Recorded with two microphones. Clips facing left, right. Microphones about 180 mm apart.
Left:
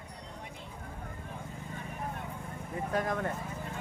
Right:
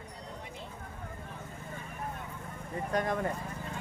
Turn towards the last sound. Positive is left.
turn(degrees=0)  # may be behind; listen again after turning